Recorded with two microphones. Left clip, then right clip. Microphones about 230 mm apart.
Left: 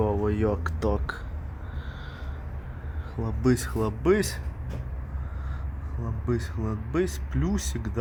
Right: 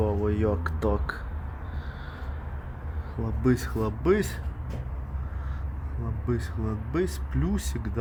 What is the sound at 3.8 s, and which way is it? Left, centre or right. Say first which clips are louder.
Speech: left 1 dB; centre.